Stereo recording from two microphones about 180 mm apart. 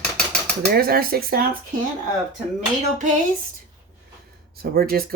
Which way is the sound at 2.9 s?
45° right (ahead or behind).